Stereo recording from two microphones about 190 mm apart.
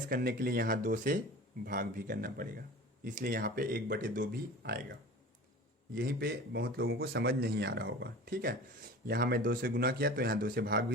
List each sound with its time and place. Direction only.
0.1 s speech: 50° right (ahead or behind)